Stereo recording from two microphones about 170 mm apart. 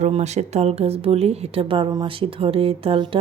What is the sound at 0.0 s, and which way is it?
Speech, 40° right (ahead or behind).